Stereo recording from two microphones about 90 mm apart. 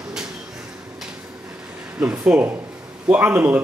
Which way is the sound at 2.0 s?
15° right (ahead or behind).